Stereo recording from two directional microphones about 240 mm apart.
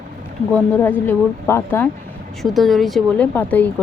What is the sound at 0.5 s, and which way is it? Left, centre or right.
Speech, centre.